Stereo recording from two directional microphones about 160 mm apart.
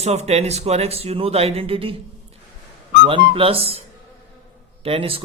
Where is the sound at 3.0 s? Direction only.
35° right (ahead or behind).